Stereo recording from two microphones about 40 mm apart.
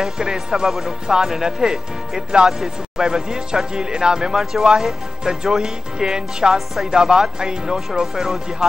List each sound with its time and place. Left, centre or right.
0.2 s speech: centre
0.7 s speech: centre
1.0 s speech: centre